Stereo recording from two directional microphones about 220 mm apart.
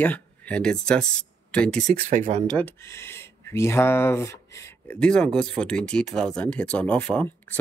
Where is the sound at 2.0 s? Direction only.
35° right (ahead or behind).